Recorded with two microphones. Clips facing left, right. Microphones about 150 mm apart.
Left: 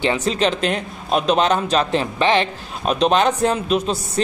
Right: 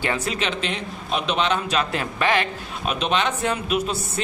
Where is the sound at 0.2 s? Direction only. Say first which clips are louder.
Left 7 dB; 35° left (ahead or behind).